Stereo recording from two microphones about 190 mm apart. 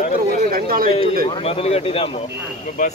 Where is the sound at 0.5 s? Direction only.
50° right (ahead or behind).